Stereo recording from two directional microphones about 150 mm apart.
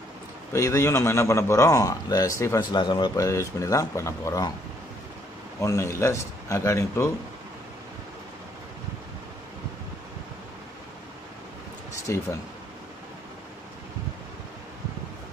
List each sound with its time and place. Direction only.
0.5 s a man's voice: 20° left (ahead or behind)
5.6 s a man's voice: 20° left (ahead or behind)
12.1 s a man's voice: 20° left (ahead or behind)